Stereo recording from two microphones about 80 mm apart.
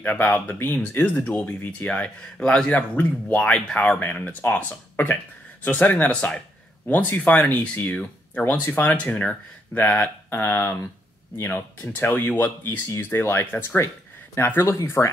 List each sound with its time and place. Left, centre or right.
0.0 s speech: left
4.0 s speech: left